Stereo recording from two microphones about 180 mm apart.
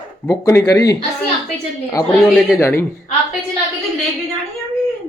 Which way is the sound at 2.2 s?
Centre (ahead or behind).